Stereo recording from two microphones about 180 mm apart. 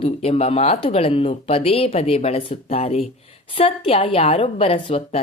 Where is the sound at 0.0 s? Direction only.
35° left (ahead or behind).